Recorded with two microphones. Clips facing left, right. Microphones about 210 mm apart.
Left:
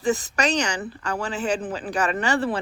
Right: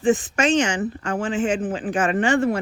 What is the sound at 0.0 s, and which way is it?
Speech, 40° left (ahead or behind).